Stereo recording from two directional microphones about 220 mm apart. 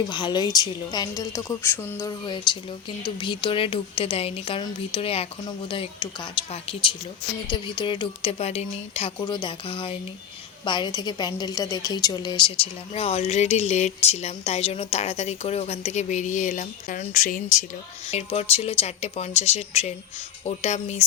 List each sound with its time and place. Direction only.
0.1 s a woman's voice: 20° left (ahead or behind)